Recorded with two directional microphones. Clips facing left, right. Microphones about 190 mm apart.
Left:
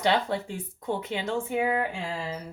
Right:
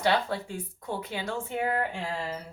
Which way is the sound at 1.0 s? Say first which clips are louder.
Left 4 dB; 20° left (ahead or behind).